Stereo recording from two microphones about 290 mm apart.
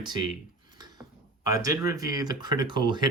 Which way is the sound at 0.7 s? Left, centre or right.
Centre.